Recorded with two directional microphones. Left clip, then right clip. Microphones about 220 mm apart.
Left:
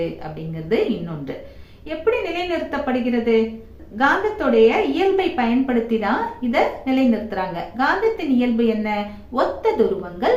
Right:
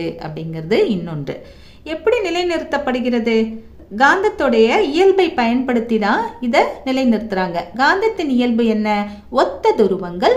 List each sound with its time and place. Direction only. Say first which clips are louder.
0.0 s a woman's voice: right 2 dB; 50° right (ahead or behind)
2.0 s a woman's voice: right 4 dB; 50° right (ahead or behind)